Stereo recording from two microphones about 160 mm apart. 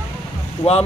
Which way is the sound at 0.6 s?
35° left (ahead or behind).